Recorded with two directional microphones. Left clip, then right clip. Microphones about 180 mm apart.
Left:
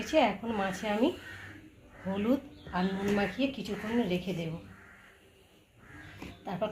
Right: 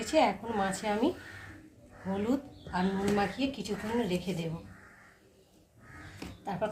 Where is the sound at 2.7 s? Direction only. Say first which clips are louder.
Right 1 dB; 20° left (ahead or behind).